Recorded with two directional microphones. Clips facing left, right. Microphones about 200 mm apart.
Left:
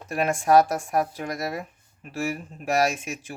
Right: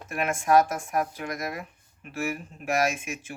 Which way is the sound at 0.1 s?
35° left (ahead or behind).